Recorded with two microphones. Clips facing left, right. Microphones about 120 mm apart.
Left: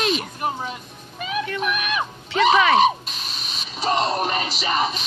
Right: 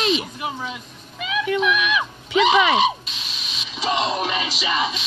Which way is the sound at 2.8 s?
50° left (ahead or behind).